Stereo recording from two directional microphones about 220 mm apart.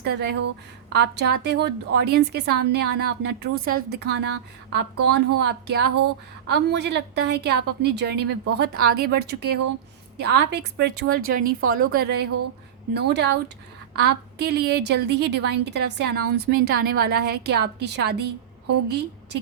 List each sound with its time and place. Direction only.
0.0 s a woman's voice: 50° right (ahead or behind)